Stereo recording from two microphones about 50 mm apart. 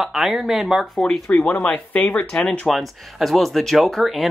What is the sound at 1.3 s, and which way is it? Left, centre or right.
Speech, left.